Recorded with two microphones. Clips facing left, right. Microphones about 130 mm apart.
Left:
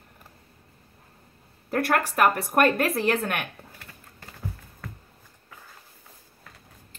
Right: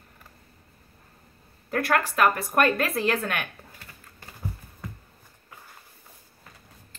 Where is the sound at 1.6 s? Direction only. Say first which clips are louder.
Even; 40° left (ahead or behind).